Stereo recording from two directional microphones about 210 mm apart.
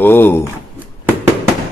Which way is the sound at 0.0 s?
10° left (ahead or behind).